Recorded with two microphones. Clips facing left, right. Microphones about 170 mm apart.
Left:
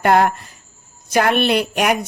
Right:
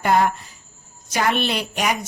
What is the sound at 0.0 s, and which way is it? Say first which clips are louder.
A woman's voice: left 4 dB; 60° left (ahead or behind).